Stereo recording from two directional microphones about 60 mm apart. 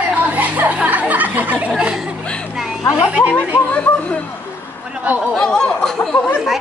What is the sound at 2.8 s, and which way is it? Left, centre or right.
Speech, left.